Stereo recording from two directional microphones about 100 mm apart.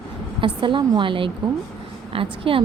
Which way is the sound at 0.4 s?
55° right (ahead or behind).